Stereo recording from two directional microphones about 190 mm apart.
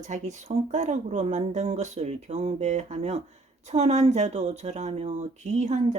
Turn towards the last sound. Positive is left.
turn(degrees=-40)  # may be behind; listen again after turning